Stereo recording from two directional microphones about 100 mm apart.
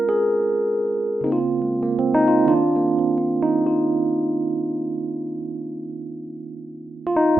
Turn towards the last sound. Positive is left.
turn(degrees=0)  # may be behind; listen again after turning